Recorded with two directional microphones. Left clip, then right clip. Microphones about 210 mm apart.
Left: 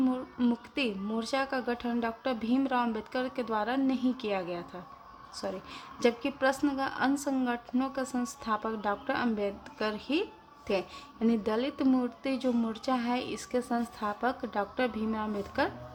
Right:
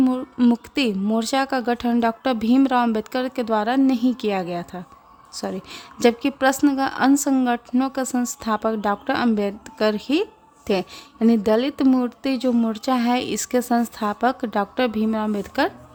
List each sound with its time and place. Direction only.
0.0 s speech: 45° right (ahead or behind)